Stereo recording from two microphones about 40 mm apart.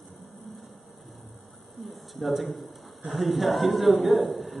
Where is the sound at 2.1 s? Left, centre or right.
Centre.